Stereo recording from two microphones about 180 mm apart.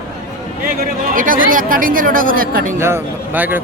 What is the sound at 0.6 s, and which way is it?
Speech, 50° right (ahead or behind).